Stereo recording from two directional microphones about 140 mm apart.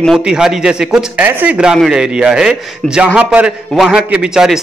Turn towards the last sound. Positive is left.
turn(degrees=-5)  # may be behind; listen again after turning